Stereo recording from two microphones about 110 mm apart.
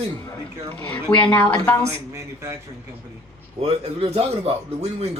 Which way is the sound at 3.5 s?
60° right (ahead or behind).